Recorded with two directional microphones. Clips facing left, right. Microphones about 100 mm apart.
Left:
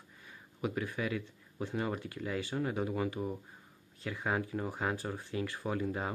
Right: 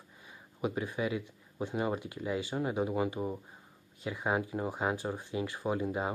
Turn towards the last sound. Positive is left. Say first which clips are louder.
# right 3 dB
turn(degrees=-20)  # may be behind; listen again after turning